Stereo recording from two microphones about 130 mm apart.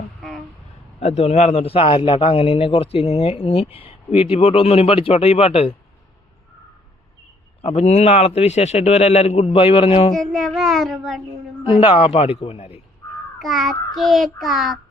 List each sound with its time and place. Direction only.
0.2 s a sound: centre (ahead or behind)
0.9 s a man's voice: 55° left (ahead or behind)
7.6 s a man's voice: 55° left (ahead or behind)
10.2 s speech: centre (ahead or behind)
11.6 s a man's voice: 45° left (ahead or behind)
13.4 s speech: centre (ahead or behind)